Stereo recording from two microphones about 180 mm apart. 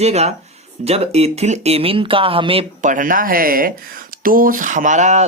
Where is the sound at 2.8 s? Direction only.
45° right (ahead or behind).